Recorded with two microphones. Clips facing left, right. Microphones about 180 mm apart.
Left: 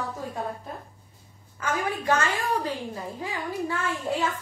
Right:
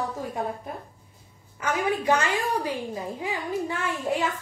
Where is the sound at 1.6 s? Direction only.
15° right (ahead or behind).